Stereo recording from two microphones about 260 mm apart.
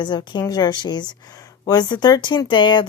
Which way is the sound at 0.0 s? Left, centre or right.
Centre.